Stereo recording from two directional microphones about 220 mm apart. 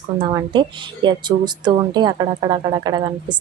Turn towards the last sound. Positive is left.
turn(degrees=-20)  # may be behind; listen again after turning